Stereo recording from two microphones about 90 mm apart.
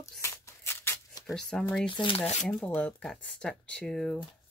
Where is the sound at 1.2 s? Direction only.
5° left (ahead or behind).